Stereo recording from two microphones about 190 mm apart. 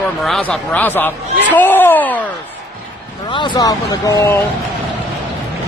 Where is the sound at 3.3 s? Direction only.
20° left (ahead or behind).